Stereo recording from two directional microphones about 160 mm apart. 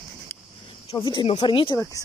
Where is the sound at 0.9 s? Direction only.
30° left (ahead or behind).